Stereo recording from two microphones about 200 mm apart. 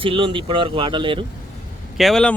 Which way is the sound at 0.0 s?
25° right (ahead or behind).